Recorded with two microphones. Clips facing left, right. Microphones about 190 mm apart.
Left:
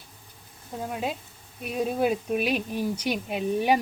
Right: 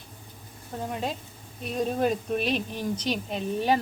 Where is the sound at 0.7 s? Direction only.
5° left (ahead or behind).